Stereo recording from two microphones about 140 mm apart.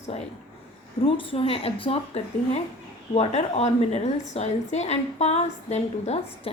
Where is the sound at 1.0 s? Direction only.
40° left (ahead or behind).